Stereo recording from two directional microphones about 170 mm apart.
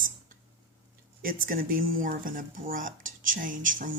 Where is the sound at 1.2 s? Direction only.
55° right (ahead or behind).